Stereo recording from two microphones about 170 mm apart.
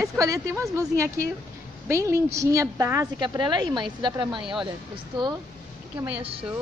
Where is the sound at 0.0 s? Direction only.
20° right (ahead or behind).